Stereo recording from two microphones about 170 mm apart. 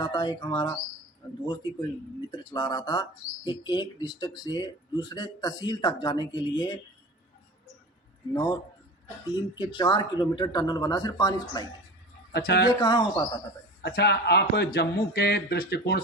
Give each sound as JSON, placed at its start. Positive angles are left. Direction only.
{"t": 0.0, "sound": "speech", "side_deg": 25}
{"t": 2.3, "sound": "speech", "side_deg": 25}
{"t": 8.3, "sound": "speech", "side_deg": 25}
{"t": 12.3, "sound": "speech", "side_deg": 70}
{"t": 12.8, "sound": "speech", "side_deg": 25}
{"t": 13.8, "sound": "speech", "side_deg": 75}